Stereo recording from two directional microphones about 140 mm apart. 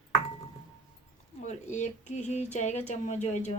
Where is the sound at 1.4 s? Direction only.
55° left (ahead or behind).